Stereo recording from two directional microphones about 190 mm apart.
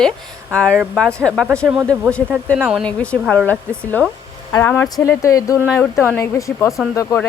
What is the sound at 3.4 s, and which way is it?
Speech, 10° left (ahead or behind).